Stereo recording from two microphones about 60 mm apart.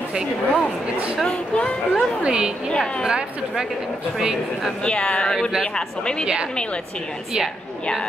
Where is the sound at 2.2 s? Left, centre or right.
Centre.